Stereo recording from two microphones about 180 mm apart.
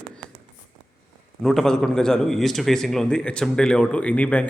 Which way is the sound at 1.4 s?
Centre (ahead or behind).